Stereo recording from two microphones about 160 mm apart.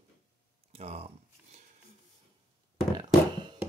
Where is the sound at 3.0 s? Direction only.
30° right (ahead or behind).